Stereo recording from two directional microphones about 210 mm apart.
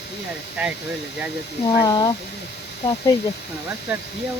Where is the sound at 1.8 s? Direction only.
20° left (ahead or behind).